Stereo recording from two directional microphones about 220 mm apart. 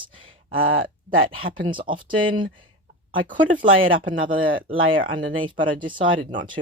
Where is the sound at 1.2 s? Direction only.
25° right (ahead or behind).